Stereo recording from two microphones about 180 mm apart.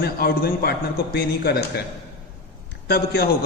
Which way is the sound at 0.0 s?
60° left (ahead or behind).